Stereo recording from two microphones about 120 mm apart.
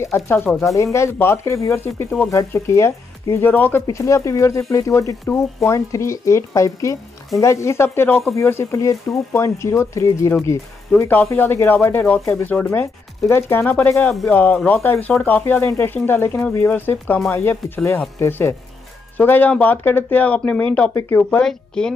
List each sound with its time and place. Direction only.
0.0 s speech: 20° left (ahead or behind)
3.8 s speech: 25° left (ahead or behind)
11.0 s speech: 15° left (ahead or behind)
13.3 s speech: 20° left (ahead or behind)